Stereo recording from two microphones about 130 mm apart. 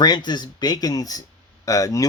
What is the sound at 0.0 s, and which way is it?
Speech, 35° left (ahead or behind).